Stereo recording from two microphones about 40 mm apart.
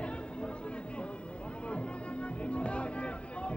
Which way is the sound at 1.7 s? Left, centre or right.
Left.